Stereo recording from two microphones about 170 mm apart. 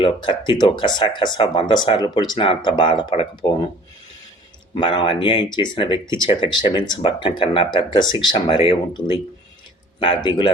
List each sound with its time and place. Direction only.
0.0 s speech: 30° left (ahead or behind)
4.7 s speech: 30° left (ahead or behind)